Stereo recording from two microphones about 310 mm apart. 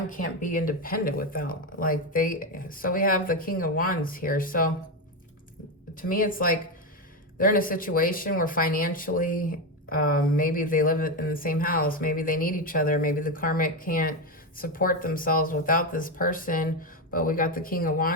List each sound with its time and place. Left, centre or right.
0.1 s speech: left
5.9 s speech: left